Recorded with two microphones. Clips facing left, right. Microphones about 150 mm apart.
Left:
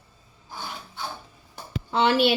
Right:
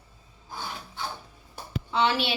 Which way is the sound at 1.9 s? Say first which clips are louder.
Left 5 dB; 55° left (ahead or behind).